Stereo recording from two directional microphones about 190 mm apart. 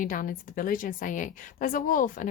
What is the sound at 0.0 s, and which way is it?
A woman's voice, 45° left (ahead or behind).